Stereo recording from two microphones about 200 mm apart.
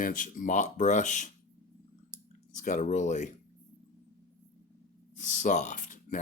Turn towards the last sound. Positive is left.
turn(degrees=40)  # may be behind; listen again after turning